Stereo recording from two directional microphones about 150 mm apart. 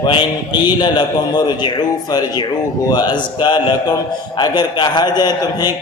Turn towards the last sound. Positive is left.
turn(degrees=25)  # may be behind; listen again after turning